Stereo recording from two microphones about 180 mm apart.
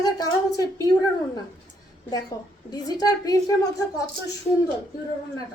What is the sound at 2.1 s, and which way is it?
A woman's voice, 20° left (ahead or behind).